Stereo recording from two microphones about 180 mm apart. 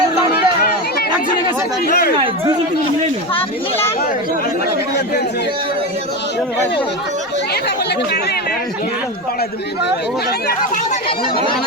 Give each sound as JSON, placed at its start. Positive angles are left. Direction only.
{"t": 0.3, "sound": "run", "side_deg": 60}
{"t": 1.9, "sound": "speech", "side_deg": 60}